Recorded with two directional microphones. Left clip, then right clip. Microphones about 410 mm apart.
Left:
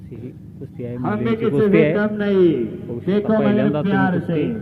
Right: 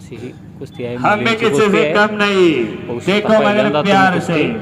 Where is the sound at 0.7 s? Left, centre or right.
Centre.